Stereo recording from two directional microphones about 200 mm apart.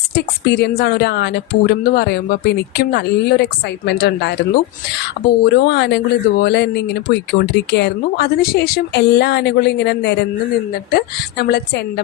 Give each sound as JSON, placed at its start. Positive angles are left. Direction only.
{"t": 0.1, "sound": "speech", "side_deg": 55}
{"t": 5.4, "sound": "a woman's voice", "side_deg": 55}